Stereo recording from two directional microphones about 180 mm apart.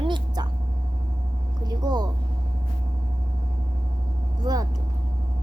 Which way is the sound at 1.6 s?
25° right (ahead or behind).